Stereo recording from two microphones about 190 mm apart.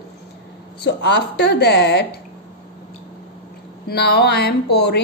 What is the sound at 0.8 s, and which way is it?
Speech, 65° left (ahead or behind).